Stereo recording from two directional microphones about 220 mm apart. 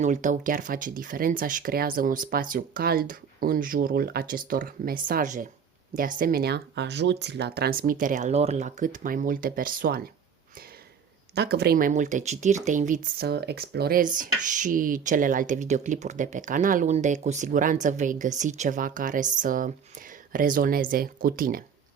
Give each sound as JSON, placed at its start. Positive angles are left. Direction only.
{"t": 0.0, "sound": "speech", "side_deg": -35}
{"t": 11.3, "sound": "speech", "side_deg": -50}
{"t": 13.1, "sound": "speech", "side_deg": -45}